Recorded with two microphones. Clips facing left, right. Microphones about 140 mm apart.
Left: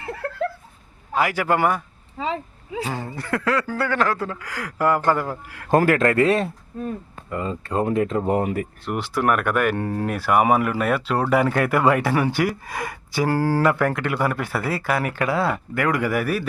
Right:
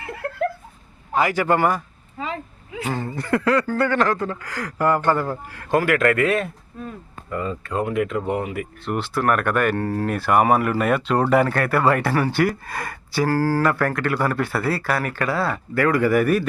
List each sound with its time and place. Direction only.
1.1 s speech: 5° left (ahead or behind)
2.2 s a sound: 30° left (ahead or behind)
2.9 s speech: 10° left (ahead or behind)
5.7 s speech: 35° left (ahead or behind)
8.8 s speech: 15° left (ahead or behind)